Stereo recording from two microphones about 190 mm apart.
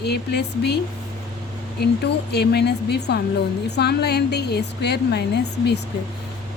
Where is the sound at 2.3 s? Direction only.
60° left (ahead or behind).